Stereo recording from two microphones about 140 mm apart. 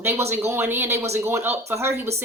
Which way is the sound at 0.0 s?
15° right (ahead or behind).